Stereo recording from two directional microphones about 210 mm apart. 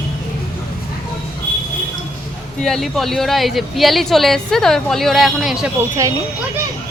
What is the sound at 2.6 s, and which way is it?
Speech, centre (ahead or behind).